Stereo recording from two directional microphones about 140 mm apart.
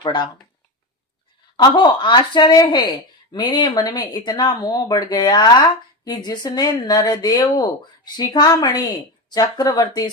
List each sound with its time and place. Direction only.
0.0 s speech: 35° left (ahead or behind)
1.5 s a woman's voice: 30° left (ahead or behind)